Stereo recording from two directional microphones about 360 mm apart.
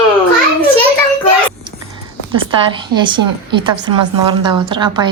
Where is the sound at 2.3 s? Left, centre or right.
Centre.